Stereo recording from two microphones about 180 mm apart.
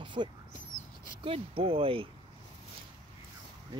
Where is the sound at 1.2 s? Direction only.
30° right (ahead or behind).